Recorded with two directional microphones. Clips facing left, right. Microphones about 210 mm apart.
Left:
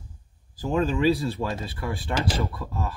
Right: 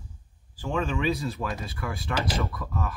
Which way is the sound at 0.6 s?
35° left (ahead or behind).